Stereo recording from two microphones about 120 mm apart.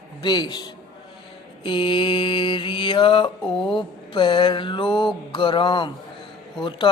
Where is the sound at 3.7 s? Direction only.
40° left (ahead or behind).